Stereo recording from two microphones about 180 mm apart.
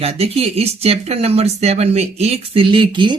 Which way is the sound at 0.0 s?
35° right (ahead or behind).